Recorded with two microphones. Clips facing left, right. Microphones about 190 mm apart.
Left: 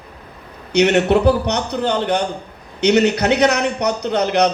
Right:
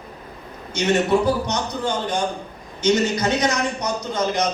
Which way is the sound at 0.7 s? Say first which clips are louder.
Left 5 dB; 65° left (ahead or behind).